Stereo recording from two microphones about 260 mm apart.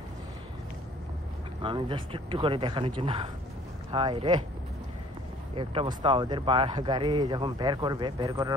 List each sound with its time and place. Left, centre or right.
1.6 s speech: centre
5.6 s speech: centre